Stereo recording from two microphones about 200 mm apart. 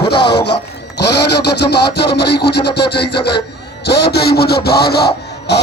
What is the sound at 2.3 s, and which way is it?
Speech, 55° left (ahead or behind).